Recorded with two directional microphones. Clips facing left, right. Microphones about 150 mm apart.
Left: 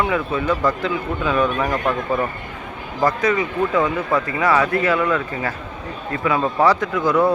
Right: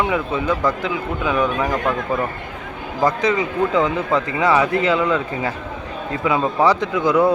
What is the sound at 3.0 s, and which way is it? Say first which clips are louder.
Speech: even; 20° right (ahead or behind).